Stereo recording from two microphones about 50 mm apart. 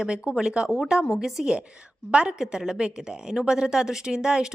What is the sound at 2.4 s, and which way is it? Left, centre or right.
A woman's voice, centre.